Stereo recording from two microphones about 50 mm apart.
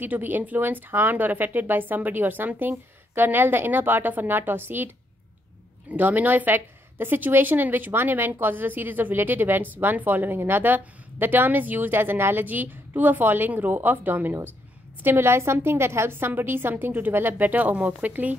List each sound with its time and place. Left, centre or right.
0.0 s speech: right
12.4 s speech: right
15.0 s a woman's voice: right